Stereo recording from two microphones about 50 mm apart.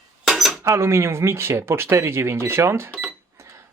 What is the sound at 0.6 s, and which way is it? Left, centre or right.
Speech, right.